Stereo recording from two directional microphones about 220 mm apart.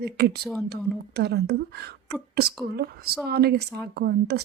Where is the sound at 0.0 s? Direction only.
45° right (ahead or behind).